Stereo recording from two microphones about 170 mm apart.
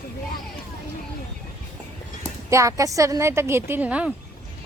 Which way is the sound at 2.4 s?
20° right (ahead or behind).